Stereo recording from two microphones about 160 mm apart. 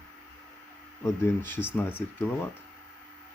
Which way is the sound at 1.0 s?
15° left (ahead or behind).